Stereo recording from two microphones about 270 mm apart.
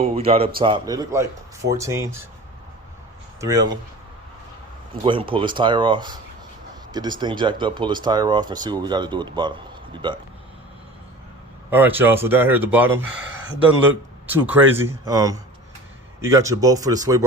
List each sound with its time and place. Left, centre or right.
0.0 s a man's voice: right
3.4 s speech: centre
5.0 s speech: centre
11.7 s speech: centre
14.3 s speech: centre